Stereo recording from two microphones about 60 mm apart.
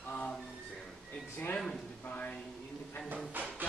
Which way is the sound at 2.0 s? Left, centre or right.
Left.